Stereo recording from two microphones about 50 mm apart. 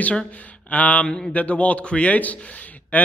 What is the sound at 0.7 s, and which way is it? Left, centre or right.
A man's voice, left.